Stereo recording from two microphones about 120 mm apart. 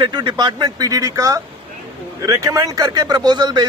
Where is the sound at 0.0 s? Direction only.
40° right (ahead or behind).